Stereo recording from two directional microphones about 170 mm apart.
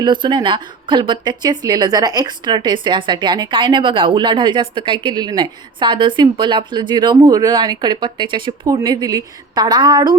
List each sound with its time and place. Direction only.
0.0 s a woman's voice: 25° right (ahead or behind)